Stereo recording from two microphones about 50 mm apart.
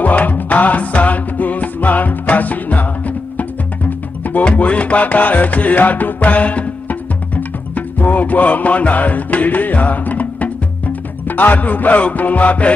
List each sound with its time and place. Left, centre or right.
0.0 s music: left
4.2 s music: left